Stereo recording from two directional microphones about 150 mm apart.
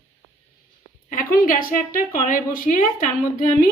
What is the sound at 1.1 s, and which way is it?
A woman's voice, 70° left (ahead or behind).